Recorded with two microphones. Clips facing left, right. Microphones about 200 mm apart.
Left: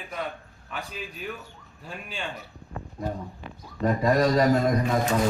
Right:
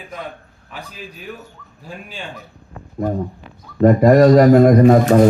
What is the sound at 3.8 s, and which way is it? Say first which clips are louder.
Speech: right 12 dB; 60° right (ahead or behind).